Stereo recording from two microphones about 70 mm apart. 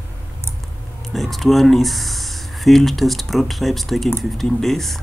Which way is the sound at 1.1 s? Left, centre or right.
Centre.